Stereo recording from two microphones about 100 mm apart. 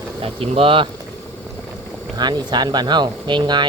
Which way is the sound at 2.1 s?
45° right (ahead or behind).